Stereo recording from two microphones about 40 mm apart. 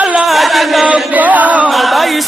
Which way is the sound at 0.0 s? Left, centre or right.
Right.